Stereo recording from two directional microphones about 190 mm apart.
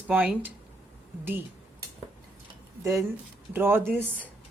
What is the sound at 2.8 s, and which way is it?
Speech, 15° right (ahead or behind).